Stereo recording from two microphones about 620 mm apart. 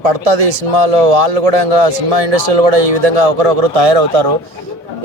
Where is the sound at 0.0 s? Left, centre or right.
Right.